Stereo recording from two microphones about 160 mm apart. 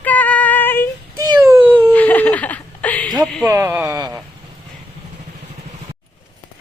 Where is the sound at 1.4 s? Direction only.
15° right (ahead or behind).